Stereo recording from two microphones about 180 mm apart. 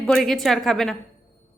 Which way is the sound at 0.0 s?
Centre (ahead or behind).